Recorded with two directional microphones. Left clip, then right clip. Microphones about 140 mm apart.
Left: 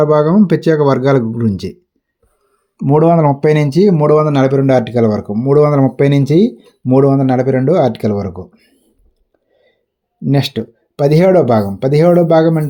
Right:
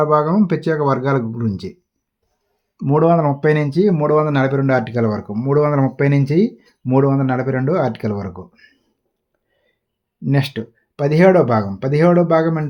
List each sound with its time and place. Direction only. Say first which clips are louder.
0.0 s speech: left 4 dB; 40° left (ahead or behind)
2.7 s speech: left 4 dB; 50° left (ahead or behind)
3.2 s speech: left 5 dB; 35° left (ahead or behind)
10.2 s speech: left 5 dB; 30° left (ahead or behind)